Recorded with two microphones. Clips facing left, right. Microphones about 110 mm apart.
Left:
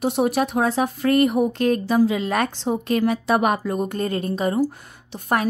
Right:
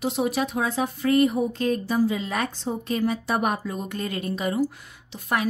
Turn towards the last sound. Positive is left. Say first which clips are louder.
# left 4 dB
turn(degrees=45)  # may be behind; listen again after turning